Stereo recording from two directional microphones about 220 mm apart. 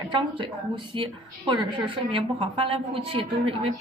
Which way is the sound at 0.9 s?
20° right (ahead or behind).